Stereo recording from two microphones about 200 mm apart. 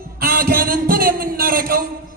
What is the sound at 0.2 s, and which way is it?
A man's voice, 45° right (ahead or behind).